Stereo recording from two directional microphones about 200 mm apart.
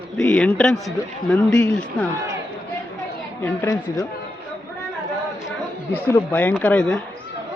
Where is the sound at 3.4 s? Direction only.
10° left (ahead or behind).